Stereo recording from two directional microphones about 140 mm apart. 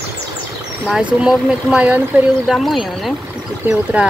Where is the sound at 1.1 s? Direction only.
5° right (ahead or behind).